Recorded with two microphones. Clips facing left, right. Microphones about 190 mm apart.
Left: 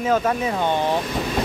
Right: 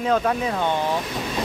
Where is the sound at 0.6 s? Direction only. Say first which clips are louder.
Left 3 dB; 20° left (ahead or behind).